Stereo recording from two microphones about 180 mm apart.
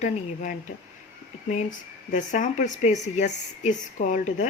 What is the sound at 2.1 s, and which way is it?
Speech, 45° left (ahead or behind).